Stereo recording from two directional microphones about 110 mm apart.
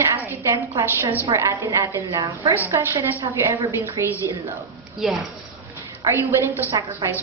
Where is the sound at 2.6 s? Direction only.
20° right (ahead or behind).